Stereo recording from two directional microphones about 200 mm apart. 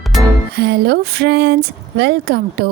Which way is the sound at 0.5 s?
55° right (ahead or behind).